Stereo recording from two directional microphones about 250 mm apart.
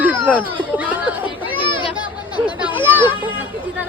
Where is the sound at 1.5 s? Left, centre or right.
Left.